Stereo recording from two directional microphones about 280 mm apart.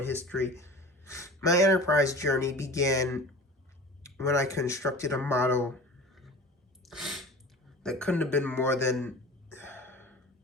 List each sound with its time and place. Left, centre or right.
0.0 s speech: centre
6.8 s a sound: centre
7.8 s throat clearing: centre